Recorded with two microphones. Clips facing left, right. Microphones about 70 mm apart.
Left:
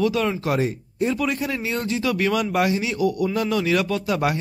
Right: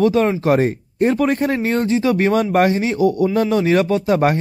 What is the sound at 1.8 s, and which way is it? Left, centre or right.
A man's voice, right.